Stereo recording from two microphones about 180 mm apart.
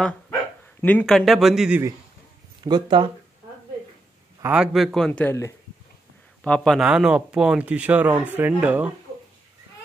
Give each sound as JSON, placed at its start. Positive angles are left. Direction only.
{"t": 0.3, "sound": "speech", "side_deg": 10}
{"t": 2.6, "sound": "speech", "side_deg": -25}
{"t": 4.4, "sound": "a man's voice", "side_deg": -5}